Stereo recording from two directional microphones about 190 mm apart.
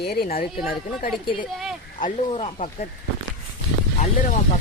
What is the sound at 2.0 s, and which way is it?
Speech, 35° left (ahead or behind).